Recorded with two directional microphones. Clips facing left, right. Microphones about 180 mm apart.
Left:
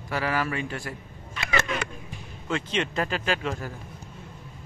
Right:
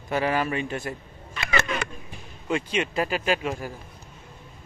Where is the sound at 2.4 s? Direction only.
10° right (ahead or behind).